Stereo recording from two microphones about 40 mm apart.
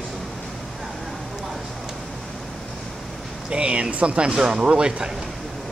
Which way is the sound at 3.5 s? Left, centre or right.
Right.